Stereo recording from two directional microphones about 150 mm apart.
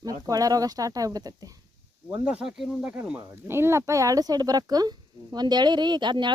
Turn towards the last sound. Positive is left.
turn(degrees=-30)  # may be behind; listen again after turning